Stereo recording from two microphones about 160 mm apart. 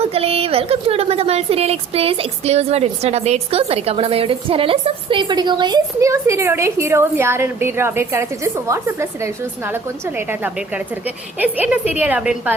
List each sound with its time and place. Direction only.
0.0 s a woman's voice: 40° right (ahead or behind); by 12.5 s 10° right (ahead or behind)